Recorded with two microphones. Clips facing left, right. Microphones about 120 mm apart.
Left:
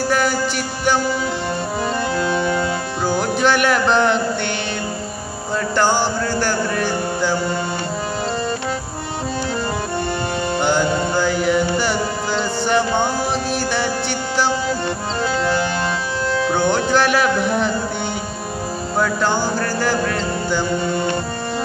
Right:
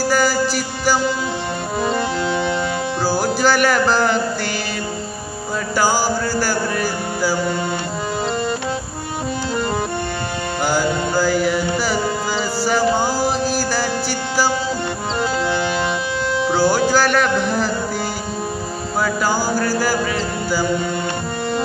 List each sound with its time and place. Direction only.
0.1 s music: centre (ahead or behind)
1.8 s organ: 20° right (ahead or behind)
3.1 s music: 5° right (ahead or behind)
5.8 s music: 5° right (ahead or behind)
10.6 s music: 5° right (ahead or behind)
15.4 s music: 15° right (ahead or behind)
16.3 s speech: 10° right (ahead or behind)
18.9 s music: 5° right (ahead or behind)